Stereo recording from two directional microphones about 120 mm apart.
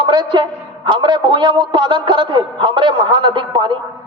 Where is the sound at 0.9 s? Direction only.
40° right (ahead or behind).